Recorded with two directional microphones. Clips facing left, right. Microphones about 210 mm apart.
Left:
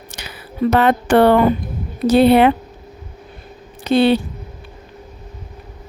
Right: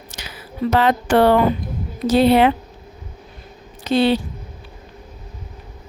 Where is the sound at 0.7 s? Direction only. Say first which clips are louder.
Left 2 dB; 55° left (ahead or behind).